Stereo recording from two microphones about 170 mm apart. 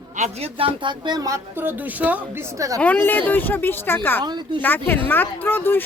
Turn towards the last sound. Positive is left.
turn(degrees=10)  # may be behind; listen again after turning